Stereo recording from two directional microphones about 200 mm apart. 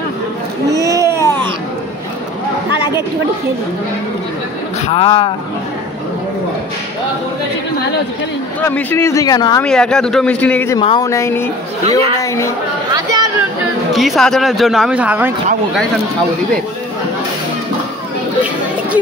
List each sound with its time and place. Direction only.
0.7 s a sound: 15° right (ahead or behind)
4.8 s a man's voice: 30° left (ahead or behind)
8.6 s speech: 10° left (ahead or behind)
9.6 s speech: 5° left (ahead or behind)
10.8 s a man's voice: 25° left (ahead or behind)
11.1 s speech: 15° left (ahead or behind)
12.9 s a sound: 20° right (ahead or behind)
13.9 s speech: centre (ahead or behind)